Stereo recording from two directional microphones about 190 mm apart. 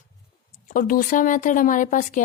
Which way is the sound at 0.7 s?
45° left (ahead or behind).